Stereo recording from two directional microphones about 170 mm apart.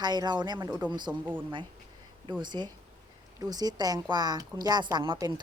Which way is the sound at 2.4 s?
25° right (ahead or behind).